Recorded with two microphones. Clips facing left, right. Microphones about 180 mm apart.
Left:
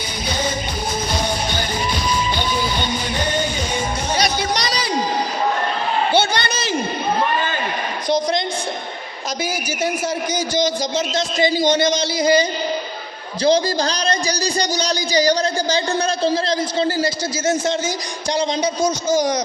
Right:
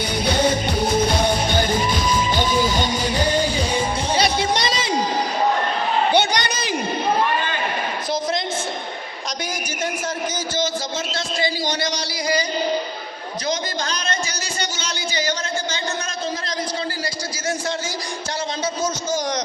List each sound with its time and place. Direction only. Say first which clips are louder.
2.3 s music: right 2 dB; 45° right (ahead or behind); by 4.9 s 25° right (ahead or behind)
6.1 s a sound: left 1 dB; 15° right (ahead or behind)
10.5 s a man's voice: left 6 dB; 15° left (ahead or behind)